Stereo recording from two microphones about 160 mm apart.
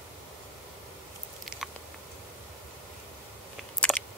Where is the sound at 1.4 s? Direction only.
Centre (ahead or behind).